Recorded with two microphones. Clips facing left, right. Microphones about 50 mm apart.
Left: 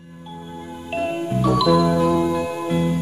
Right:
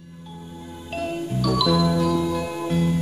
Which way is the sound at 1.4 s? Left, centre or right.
Left.